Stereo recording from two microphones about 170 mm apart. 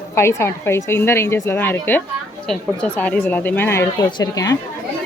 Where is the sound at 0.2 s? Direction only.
15° left (ahead or behind).